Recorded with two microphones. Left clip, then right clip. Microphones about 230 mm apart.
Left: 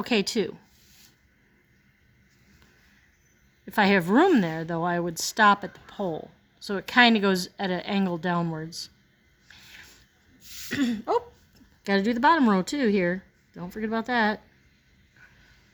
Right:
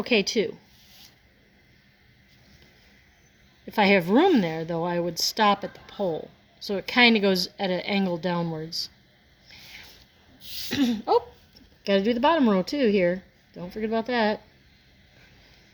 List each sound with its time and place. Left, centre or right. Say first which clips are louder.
0.0 s speech: right 3 dB; left
3.7 s a woman's voice: right 1 dB; left
10.7 s speech: right 3 dB; centre
12.0 s speech: left 2 dB; left